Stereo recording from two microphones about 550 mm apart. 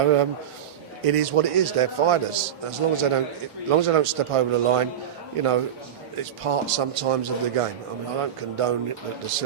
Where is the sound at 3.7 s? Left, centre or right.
Right.